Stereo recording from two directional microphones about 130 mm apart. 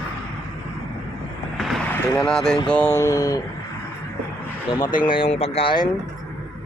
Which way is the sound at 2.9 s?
25° left (ahead or behind).